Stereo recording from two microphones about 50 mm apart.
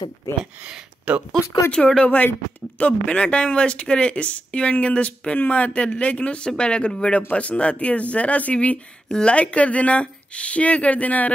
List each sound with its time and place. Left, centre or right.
0.3 s speech: left
0.7 s speech: right
1.7 s speech: centre
2.0 s speech: left